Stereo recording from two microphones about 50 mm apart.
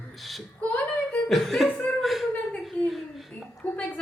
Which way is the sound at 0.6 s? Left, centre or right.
Left.